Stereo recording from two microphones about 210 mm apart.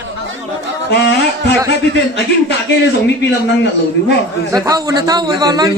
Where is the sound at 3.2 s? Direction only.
55° left (ahead or behind).